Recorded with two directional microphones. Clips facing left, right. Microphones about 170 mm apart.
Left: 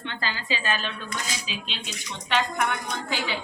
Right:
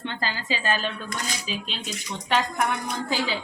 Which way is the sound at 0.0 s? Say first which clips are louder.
Right 2 dB; 40° right (ahead or behind).